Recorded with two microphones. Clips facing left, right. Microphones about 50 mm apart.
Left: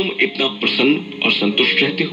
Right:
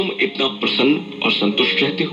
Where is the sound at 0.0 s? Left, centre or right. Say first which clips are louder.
Left 1 dB; left.